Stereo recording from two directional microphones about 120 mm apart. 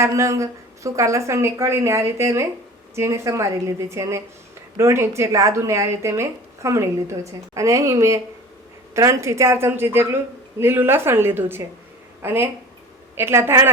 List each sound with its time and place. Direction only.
0.0 s a woman's voice: 25° right (ahead or behind)